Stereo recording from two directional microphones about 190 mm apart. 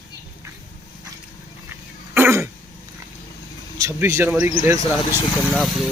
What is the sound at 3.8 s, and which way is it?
Speech, 15° right (ahead or behind).